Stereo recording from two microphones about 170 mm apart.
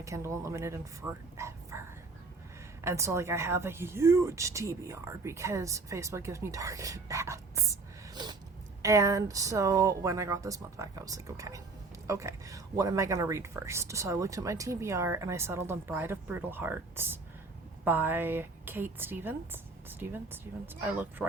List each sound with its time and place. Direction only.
0.0 s speech: 15° right (ahead or behind)
2.8 s speech: 15° right (ahead or behind)